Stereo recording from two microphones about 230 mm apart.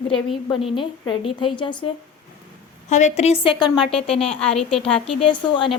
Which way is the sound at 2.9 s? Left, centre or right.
Left.